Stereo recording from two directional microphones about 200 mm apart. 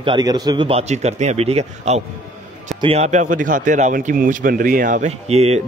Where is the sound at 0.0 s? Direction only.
20° right (ahead or behind).